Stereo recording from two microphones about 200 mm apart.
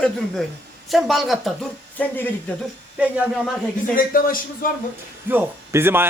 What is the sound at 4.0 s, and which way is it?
Speech, 45° left (ahead or behind).